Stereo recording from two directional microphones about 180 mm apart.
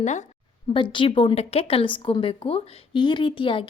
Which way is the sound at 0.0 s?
40° left (ahead or behind).